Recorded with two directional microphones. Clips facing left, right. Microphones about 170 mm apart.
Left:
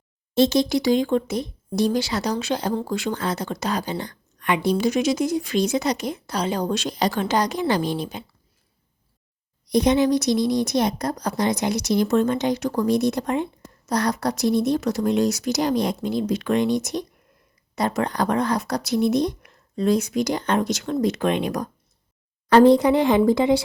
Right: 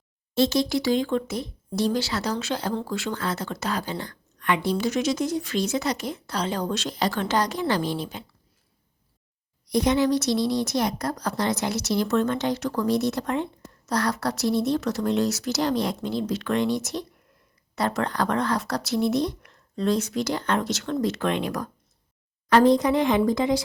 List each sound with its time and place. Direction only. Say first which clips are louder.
0.3 s speech: left 3 dB; 20° left (ahead or behind)
9.6 s speech: left 3 dB; 20° left (ahead or behind)
22.4 s speech: left 4 dB; 30° left (ahead or behind)